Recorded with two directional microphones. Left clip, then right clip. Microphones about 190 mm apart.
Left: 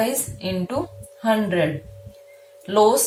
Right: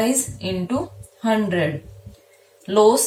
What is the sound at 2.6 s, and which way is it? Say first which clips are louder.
Speech: right 1 dB; 30° left (ahead or behind).